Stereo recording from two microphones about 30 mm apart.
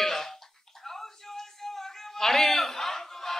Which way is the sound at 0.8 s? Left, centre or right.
Centre.